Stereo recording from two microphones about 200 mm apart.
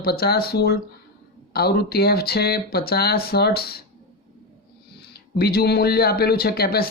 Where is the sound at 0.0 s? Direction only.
50° left (ahead or behind).